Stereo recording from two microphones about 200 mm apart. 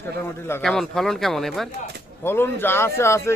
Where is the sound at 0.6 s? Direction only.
Centre (ahead or behind).